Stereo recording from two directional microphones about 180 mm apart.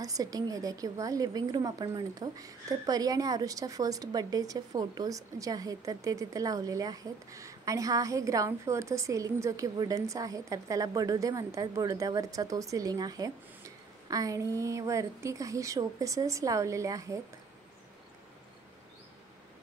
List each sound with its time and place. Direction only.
0.0 s a woman's voice: 20° right (ahead or behind)